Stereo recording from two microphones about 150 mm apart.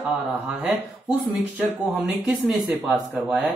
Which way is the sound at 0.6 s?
10° right (ahead or behind).